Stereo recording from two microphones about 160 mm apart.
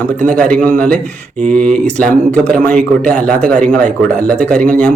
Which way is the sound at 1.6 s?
55° right (ahead or behind).